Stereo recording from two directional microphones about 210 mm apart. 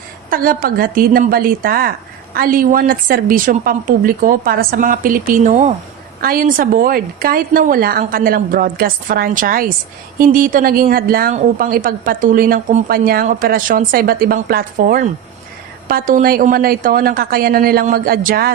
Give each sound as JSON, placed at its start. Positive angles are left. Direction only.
{"t": 0.3, "sound": "a woman's voice", "side_deg": -40}